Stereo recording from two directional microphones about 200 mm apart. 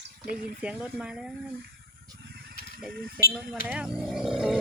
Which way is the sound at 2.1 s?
50° right (ahead or behind).